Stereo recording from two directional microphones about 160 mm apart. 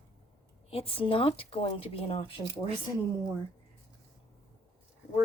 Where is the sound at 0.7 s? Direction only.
35° left (ahead or behind).